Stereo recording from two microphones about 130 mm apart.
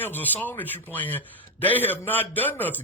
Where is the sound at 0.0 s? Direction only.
15° left (ahead or behind).